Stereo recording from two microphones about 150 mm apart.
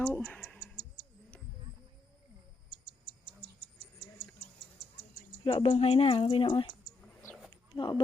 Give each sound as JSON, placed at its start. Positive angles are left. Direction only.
{"t": 0.1, "sound": "tick", "side_deg": 5}
{"t": 5.5, "sound": "speech", "side_deg": 35}
{"t": 7.5, "sound": "wild animals", "side_deg": 30}